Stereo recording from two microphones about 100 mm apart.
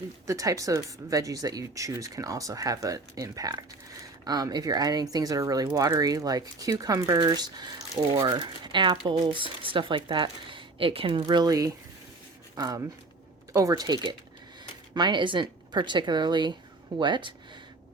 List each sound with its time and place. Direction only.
0.3 s speech: 35° right (ahead or behind); by 11.2 s 60° right (ahead or behind)
11.3 s speech: 40° right (ahead or behind)